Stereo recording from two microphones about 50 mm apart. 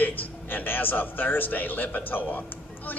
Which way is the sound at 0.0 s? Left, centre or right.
Left.